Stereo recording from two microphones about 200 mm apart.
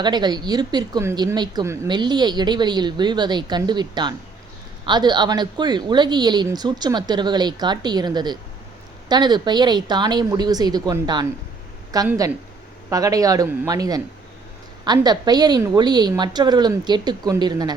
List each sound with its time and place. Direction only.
0.0 s a woman's voice: 20° right (ahead or behind)